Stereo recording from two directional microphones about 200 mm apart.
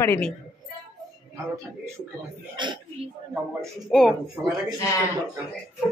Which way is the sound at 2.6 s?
25° right (ahead or behind).